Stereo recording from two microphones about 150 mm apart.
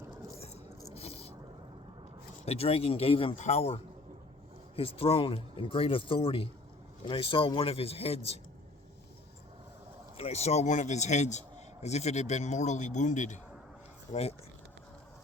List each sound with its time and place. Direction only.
0.9 s a sound: 40° left (ahead or behind)
2.4 s speech: 40° left (ahead or behind)
4.8 s speech: 40° left (ahead or behind)
10.2 s speech: 45° left (ahead or behind)
14.1 s speech: 40° left (ahead or behind)